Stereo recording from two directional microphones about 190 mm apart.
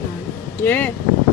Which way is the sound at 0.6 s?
10° left (ahead or behind).